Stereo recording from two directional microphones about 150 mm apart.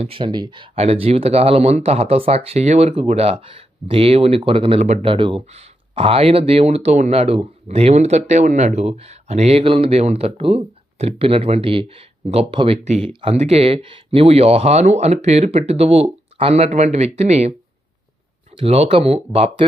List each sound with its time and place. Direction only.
0.0 s speech: 35° right (ahead or behind)
18.5 s speech: 40° right (ahead or behind)